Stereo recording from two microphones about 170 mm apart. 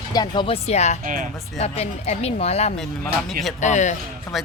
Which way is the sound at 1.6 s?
40° left (ahead or behind).